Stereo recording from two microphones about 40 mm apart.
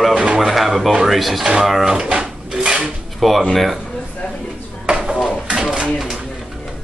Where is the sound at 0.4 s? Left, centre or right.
Centre.